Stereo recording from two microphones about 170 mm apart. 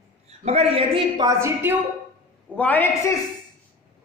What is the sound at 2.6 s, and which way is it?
Speech, 10° left (ahead or behind).